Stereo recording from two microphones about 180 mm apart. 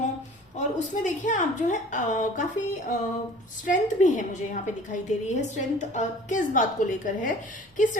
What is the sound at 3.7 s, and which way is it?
A woman's voice, 45° left (ahead or behind).